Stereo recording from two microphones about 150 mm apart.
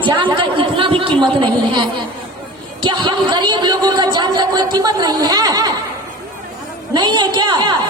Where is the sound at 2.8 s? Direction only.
30° right (ahead or behind).